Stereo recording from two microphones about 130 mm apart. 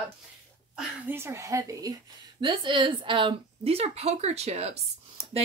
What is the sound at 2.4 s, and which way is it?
Speech, 40° right (ahead or behind).